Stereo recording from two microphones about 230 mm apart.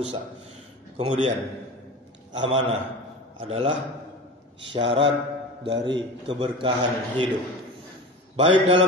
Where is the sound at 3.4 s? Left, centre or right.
Right.